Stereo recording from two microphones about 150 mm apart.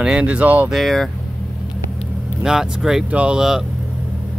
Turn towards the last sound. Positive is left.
turn(degrees=-5)  # may be behind; listen again after turning